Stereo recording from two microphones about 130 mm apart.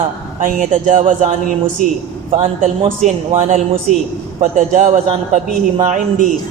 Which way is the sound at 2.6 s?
70° right (ahead or behind).